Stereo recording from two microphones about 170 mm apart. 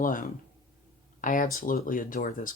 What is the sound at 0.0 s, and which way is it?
Speech, 55° left (ahead or behind).